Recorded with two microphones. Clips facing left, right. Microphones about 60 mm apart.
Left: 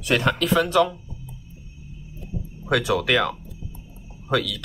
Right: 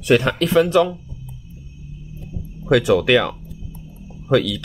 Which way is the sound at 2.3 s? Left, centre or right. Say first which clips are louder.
Left 2 dB; left.